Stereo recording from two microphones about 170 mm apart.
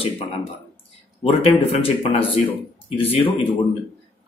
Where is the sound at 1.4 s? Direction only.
35° left (ahead or behind).